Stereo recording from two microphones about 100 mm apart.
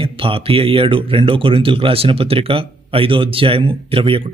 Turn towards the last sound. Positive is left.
turn(degrees=-60)  # may be behind; listen again after turning